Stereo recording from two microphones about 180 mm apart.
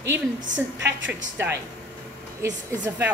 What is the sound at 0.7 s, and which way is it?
Speech, 80° right.